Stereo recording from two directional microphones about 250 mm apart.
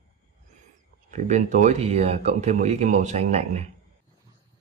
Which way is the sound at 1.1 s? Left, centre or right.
Right.